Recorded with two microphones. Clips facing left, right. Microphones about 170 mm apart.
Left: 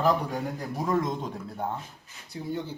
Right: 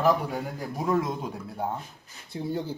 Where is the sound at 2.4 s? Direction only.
35° right (ahead or behind).